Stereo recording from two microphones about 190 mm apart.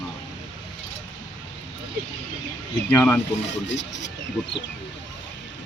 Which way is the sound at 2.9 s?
10° left (ahead or behind).